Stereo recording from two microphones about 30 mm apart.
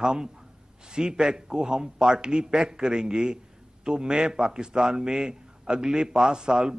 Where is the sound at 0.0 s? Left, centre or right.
Right.